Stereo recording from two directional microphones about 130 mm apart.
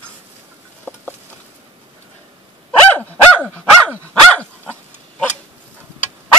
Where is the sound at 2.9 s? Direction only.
15° left (ahead or behind).